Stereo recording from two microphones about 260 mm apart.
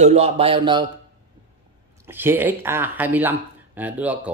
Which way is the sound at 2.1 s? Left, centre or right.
Centre.